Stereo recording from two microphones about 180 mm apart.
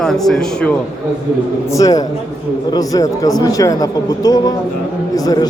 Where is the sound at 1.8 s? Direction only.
20° left (ahead or behind).